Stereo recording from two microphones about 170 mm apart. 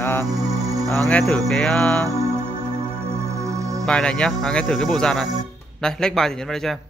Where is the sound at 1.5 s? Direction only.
5° left (ahead or behind).